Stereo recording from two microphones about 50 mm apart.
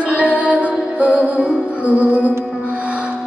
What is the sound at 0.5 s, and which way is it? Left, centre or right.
Music, right.